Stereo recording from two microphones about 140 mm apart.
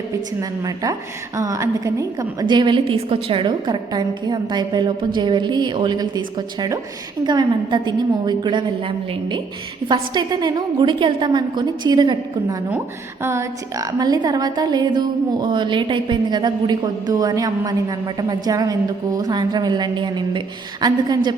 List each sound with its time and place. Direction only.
0.6 s a woman's voice: 25° right (ahead or behind)
9.9 s a woman's voice: 30° right (ahead or behind)